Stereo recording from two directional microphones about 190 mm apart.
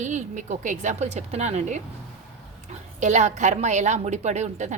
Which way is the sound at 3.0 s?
40° right (ahead or behind).